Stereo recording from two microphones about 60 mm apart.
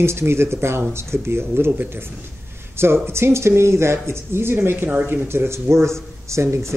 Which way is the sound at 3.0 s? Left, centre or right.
Right.